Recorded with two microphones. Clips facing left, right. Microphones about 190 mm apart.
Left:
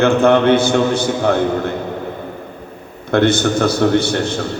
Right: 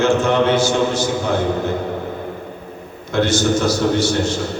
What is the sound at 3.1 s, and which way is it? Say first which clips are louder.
A man's voice: left 3 dB; 60° left (ahead or behind).